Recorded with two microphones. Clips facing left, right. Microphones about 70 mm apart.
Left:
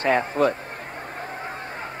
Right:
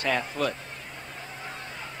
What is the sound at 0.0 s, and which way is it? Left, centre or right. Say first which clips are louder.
Speech: left 7 dB; left.